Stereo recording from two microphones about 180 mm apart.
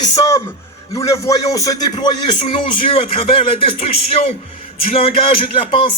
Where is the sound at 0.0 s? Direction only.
20° left (ahead or behind).